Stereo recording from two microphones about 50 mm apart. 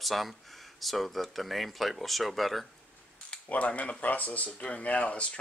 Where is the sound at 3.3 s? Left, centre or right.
Left.